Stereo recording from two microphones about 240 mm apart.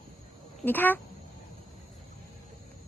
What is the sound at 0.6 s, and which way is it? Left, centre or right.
Speech, centre.